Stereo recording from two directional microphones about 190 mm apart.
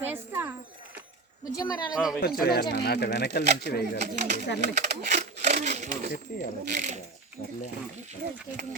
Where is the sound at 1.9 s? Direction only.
Centre (ahead or behind).